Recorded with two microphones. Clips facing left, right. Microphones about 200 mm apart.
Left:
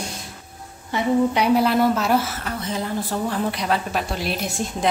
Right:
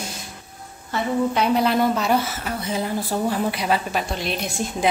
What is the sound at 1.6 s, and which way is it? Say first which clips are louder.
Speech: left 1 dB; centre (ahead or behind).